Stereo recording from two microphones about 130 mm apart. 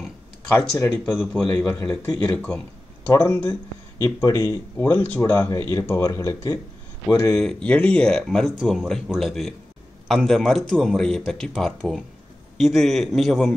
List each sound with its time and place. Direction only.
0.5 s speech: 15° left (ahead or behind)
7.3 s speech: 5° left (ahead or behind)